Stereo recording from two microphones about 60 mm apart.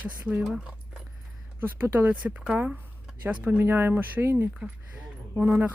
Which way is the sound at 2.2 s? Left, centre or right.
Centre.